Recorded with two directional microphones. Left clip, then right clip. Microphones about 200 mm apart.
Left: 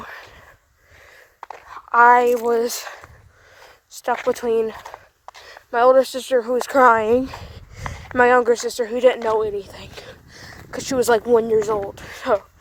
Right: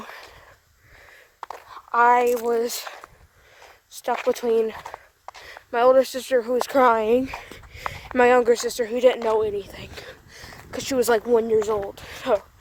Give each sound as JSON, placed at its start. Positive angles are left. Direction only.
{"t": 0.0, "sound": "a sound", "side_deg": 20}
{"t": 1.6, "sound": "speech", "side_deg": 35}
{"t": 3.6, "sound": "speech", "side_deg": 25}
{"t": 4.8, "sound": "a sound", "side_deg": 35}
{"t": 5.5, "sound": "speech", "side_deg": 20}
{"t": 7.9, "sound": "speech", "side_deg": 10}